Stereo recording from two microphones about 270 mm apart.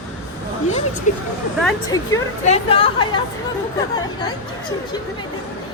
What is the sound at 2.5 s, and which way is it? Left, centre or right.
Speech, left.